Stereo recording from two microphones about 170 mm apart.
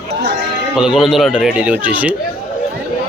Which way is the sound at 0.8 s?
5° right (ahead or behind).